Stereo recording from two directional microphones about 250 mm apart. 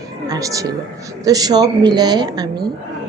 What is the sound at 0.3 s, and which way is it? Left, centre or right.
A woman's voice, centre.